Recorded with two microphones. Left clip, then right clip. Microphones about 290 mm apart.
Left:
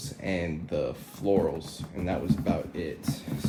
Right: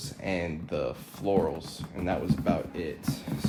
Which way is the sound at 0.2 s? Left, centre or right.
Right.